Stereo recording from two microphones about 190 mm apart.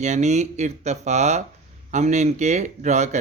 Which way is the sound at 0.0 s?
35° right (ahead or behind).